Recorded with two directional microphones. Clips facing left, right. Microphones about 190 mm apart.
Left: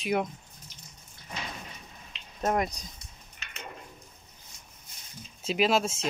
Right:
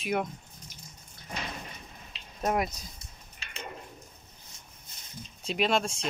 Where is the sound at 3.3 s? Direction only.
30° right (ahead or behind).